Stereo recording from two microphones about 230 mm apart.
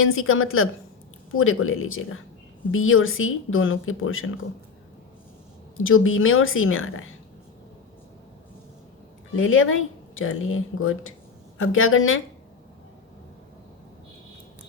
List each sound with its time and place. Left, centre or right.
0.0 s speech: left
5.7 s speech: left
9.3 s speech: left